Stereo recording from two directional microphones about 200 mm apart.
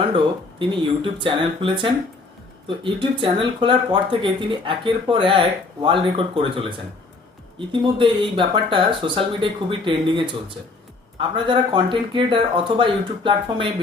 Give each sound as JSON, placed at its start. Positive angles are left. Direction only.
{"t": 0.6, "sound": "speech", "side_deg": -25}